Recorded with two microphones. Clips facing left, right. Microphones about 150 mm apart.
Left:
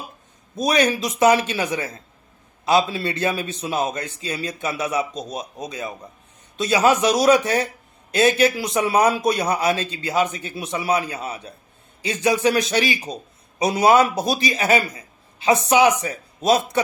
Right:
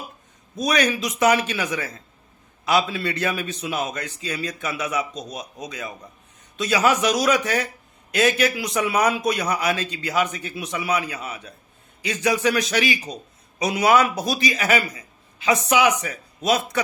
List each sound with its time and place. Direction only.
0.6 s speech: 30° left (ahead or behind)